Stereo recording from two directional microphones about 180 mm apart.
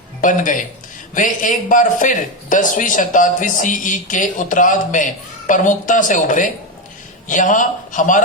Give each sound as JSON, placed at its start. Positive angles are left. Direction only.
{"t": 0.2, "sound": "a man's voice", "side_deg": 45}